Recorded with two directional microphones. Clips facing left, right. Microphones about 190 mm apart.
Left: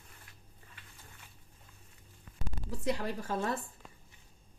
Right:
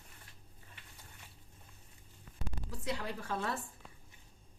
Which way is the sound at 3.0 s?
45° left (ahead or behind).